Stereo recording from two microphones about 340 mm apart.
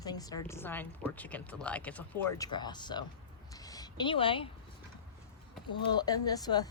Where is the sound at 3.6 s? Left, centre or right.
Centre.